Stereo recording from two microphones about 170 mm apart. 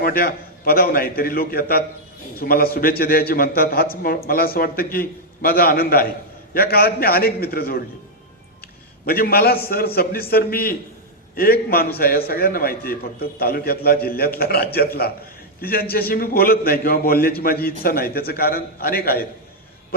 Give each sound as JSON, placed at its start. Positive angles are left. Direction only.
{"t": 0.0, "sound": "a man's voice", "side_deg": 60}
{"t": 9.0, "sound": "a man's voice", "side_deg": 60}